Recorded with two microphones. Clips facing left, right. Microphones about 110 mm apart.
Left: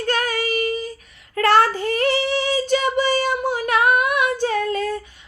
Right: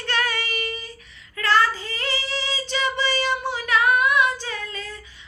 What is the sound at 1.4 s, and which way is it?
Child singing, 60° left (ahead or behind).